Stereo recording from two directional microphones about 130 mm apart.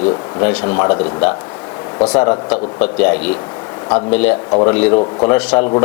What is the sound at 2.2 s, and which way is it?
Speech, 15° left (ahead or behind).